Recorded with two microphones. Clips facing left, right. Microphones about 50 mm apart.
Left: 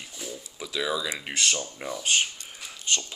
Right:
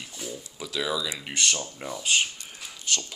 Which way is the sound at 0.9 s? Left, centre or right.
Left.